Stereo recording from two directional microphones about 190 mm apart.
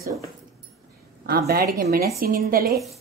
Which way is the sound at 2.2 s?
50° right (ahead or behind).